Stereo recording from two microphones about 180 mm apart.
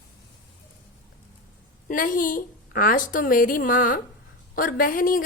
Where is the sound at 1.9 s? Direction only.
50° left (ahead or behind).